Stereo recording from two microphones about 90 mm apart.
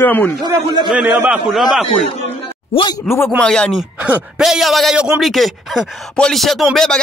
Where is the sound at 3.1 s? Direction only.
Centre (ahead or behind).